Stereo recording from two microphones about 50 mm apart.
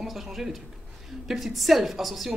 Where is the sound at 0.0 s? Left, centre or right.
Centre.